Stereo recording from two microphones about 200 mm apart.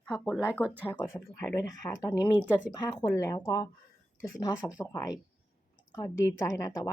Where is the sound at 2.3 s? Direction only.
10° right (ahead or behind).